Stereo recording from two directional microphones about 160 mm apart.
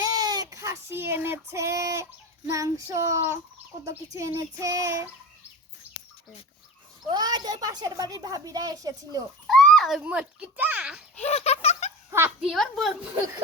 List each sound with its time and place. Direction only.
0.0 s child singing: 25° right (ahead or behind)
2.5 s a woman's voice: 20° right (ahead or behind)
7.1 s a woman's voice: 25° right (ahead or behind)
9.5 s a child's voice: centre (ahead or behind)
11.2 s a sound: 40° left (ahead or behind)
12.4 s a child's voice: centre (ahead or behind)